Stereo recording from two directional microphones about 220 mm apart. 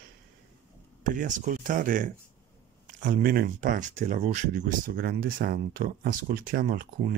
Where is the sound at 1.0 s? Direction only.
35° right (ahead or behind).